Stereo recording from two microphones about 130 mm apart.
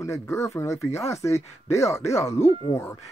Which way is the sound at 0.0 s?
20° left (ahead or behind).